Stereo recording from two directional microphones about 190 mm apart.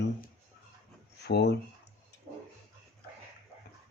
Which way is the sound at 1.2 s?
65° left (ahead or behind).